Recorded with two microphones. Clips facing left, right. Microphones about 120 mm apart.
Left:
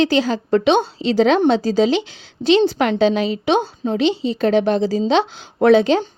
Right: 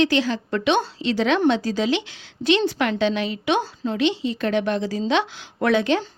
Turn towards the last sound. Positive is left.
turn(degrees=30)  # may be behind; listen again after turning